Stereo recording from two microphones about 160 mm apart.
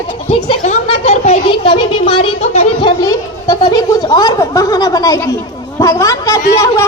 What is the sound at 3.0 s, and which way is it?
A woman's voice, 25° left (ahead or behind).